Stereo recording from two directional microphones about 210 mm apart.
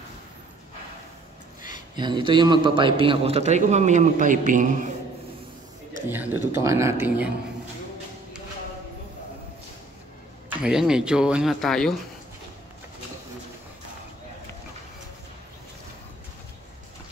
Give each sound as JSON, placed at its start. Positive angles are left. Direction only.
{"t": 1.7, "sound": "a man's voice", "side_deg": -20}
{"t": 6.5, "sound": "speech", "side_deg": -15}
{"t": 10.6, "sound": "speech", "side_deg": -5}